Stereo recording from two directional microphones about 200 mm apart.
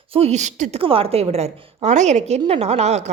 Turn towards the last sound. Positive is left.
turn(degrees=-35)  # may be behind; listen again after turning